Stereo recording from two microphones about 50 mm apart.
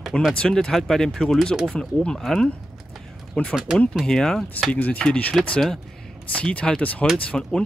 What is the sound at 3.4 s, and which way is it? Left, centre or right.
Speech, centre.